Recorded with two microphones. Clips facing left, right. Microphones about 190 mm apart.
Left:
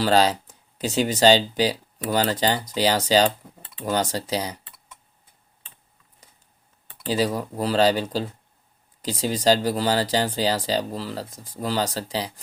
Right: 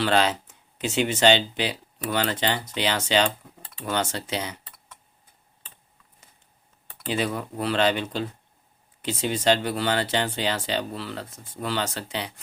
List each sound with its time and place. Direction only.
0.0 s speech: 35° left (ahead or behind)
7.0 s speech: 35° left (ahead or behind)